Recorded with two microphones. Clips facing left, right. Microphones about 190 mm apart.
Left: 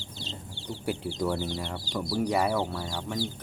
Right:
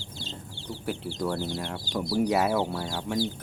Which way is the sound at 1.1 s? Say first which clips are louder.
Even; centre (ahead or behind).